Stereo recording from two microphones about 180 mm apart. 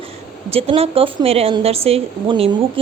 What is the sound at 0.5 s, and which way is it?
Speech, 30° right (ahead or behind).